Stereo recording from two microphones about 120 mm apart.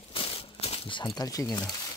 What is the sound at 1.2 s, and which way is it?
Speech, 30° left (ahead or behind).